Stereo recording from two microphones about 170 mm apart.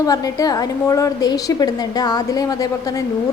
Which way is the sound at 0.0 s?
20° left (ahead or behind).